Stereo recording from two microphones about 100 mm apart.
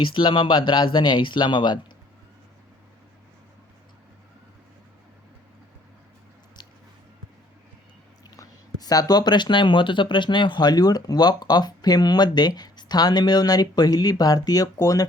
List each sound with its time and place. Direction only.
0.0 s speech: 55° left (ahead or behind)
8.8 s speech: 40° left (ahead or behind)